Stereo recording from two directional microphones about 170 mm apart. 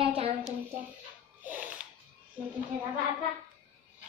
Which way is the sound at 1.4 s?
10° right (ahead or behind).